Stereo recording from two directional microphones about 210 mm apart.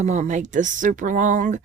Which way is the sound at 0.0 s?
35° right (ahead or behind).